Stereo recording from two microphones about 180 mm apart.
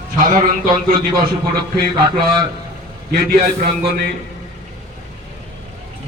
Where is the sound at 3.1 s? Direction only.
60° right (ahead or behind).